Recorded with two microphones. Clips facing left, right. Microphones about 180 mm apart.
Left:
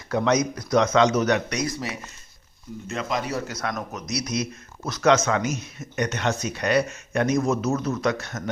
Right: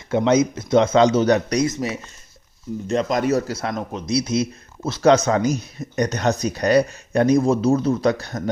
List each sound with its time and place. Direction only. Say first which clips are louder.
0.1 s speech: right 5 dB; 25° right (ahead or behind)
1.6 s speech: right 6 dB; 20° right (ahead or behind)
2.8 s a man's voice: right 8 dB; 35° right (ahead or behind)
3.5 s speech: right 4 dB; 25° right (ahead or behind)